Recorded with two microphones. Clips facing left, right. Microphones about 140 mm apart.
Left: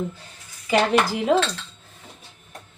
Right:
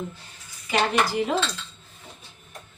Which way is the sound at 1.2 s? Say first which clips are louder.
Left 5 dB; 90° left.